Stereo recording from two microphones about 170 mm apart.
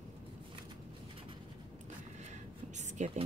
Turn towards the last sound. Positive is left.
turn(degrees=-45)  # may be behind; listen again after turning